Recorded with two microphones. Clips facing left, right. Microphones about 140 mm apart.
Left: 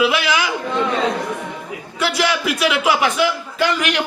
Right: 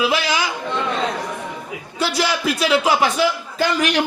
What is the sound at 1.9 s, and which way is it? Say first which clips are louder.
A man's voice: left 1 dB; 30° right (ahead or behind).